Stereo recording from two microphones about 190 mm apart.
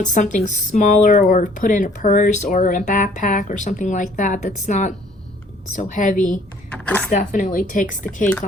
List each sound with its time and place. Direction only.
0.0 s speech: 40° left (ahead or behind)
6.8 s speech: 5° left (ahead or behind)
7.1 s speech: 40° left (ahead or behind)